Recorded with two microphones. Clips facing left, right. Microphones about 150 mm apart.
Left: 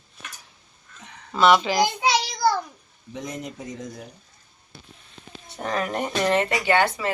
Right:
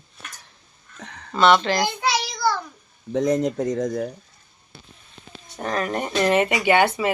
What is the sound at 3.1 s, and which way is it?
Speech, 90° right.